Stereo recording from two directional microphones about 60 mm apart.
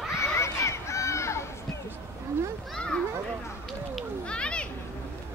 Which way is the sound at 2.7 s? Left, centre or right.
Centre.